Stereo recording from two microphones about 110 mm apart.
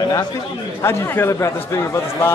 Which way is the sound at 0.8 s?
20° left (ahead or behind).